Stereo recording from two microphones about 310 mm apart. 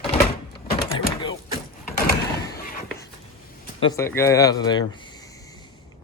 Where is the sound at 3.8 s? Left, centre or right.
Centre.